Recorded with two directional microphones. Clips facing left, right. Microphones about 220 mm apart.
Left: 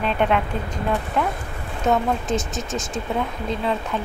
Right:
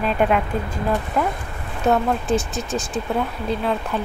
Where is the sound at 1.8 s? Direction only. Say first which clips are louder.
Right 2 dB; 10° right (ahead or behind).